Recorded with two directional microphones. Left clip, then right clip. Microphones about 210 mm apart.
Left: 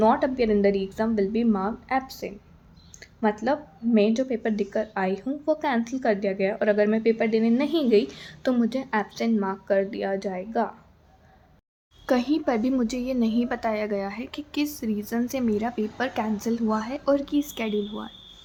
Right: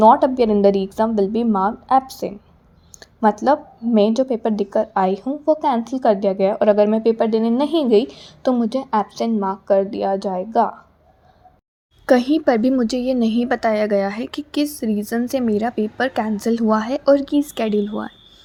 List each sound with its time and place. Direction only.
0.0 s a woman's voice: 20° right (ahead or behind)
3.0 s a sound: 20° right (ahead or behind)
3.4 s a woman's voice: 25° right (ahead or behind)
12.0 s a woman's voice: 30° right (ahead or behind)